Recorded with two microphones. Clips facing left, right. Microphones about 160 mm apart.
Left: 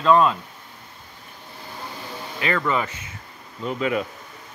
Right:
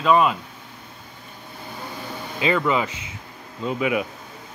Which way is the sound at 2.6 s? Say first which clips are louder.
Right 2 dB; 15° right (ahead or behind).